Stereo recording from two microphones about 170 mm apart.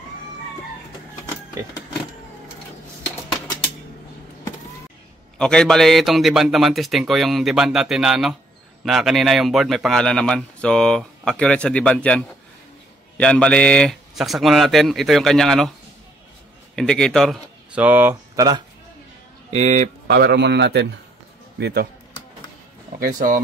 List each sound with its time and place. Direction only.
5.4 s speech: 5° left (ahead or behind)
16.7 s speech: 5° left (ahead or behind); by 18.6 s 20° right (ahead or behind)
19.5 s speech: 40° right (ahead or behind)
20.1 s a man's voice: 65° right (ahead or behind); by 20.9 s 90° right
21.5 s speech: 80° right
22.9 s speech: 55° right (ahead or behind)